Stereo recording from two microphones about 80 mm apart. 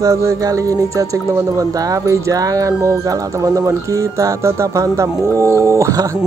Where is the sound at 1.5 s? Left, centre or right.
Right.